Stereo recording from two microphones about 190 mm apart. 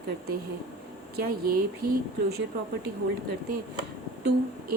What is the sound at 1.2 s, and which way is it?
Speech, 50° right (ahead or behind).